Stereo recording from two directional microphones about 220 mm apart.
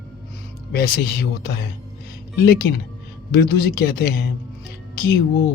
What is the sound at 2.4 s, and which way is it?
Speech, 45° left (ahead or behind).